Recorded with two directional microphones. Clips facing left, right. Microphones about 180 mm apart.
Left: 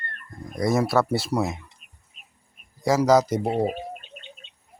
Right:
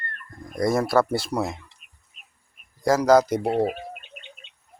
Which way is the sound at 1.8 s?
45° left (ahead or behind).